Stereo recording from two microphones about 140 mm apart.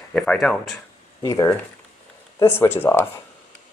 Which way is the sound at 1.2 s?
20° left (ahead or behind).